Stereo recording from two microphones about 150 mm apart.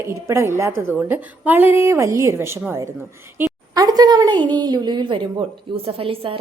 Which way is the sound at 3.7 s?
25° right (ahead or behind).